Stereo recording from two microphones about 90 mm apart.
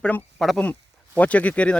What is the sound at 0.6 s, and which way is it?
Speech, 15° left (ahead or behind).